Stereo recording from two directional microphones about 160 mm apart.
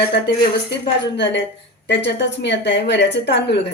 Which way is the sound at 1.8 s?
90° left.